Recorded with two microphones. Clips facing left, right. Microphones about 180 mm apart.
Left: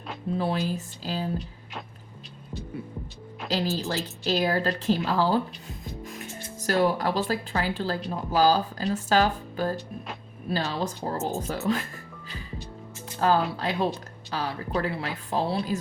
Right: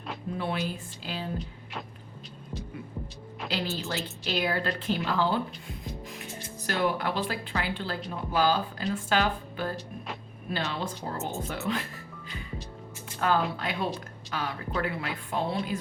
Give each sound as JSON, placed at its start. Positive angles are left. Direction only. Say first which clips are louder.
{"t": 0.3, "sound": "speech", "louder": "left 5 dB", "side_deg": 35}
{"t": 3.5, "sound": "speech", "louder": "left 5 dB", "side_deg": 40}
{"t": 13.1, "sound": "speech", "louder": "left 3 dB", "side_deg": 30}